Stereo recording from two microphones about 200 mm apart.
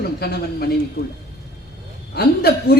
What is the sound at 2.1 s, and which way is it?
Speech, 50° left (ahead or behind).